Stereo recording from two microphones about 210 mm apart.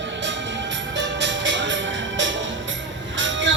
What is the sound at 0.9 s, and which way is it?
Music, 60° right (ahead or behind).